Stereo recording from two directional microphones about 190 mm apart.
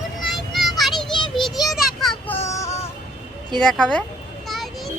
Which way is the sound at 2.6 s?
35° left (ahead or behind).